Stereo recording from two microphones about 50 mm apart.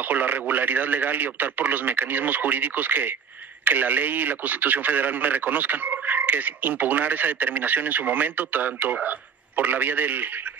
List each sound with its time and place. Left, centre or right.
0.0 s speech: right